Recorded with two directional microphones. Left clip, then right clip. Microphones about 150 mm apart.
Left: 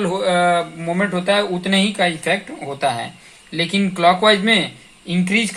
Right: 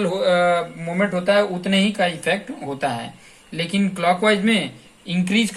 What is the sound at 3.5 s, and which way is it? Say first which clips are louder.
Speech: left 4 dB; 45° left (ahead or behind).